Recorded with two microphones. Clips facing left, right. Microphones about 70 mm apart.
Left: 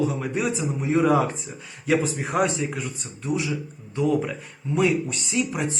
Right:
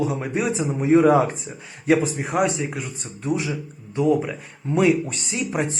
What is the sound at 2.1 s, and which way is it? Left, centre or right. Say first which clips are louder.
Speech: right 1 dB; centre.